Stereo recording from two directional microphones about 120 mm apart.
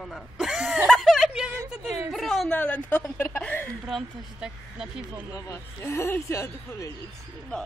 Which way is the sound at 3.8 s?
Centre (ahead or behind).